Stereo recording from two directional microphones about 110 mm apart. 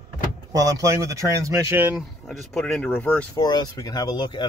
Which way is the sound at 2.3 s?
Centre (ahead or behind).